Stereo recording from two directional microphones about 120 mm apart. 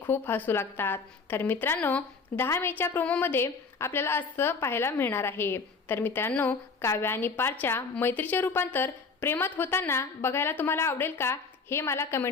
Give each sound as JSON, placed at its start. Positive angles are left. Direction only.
{"t": 0.1, "sound": "a woman's voice", "side_deg": 15}